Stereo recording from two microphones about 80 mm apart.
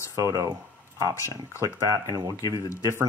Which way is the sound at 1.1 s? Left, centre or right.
Left.